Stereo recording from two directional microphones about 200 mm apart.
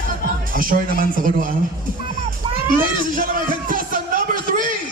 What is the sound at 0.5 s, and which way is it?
Speech, 45° right (ahead or behind).